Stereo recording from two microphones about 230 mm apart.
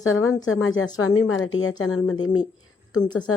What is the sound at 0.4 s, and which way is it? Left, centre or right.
A woman's voice, left.